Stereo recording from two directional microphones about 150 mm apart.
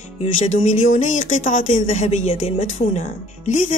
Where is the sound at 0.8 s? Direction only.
55° left (ahead or behind).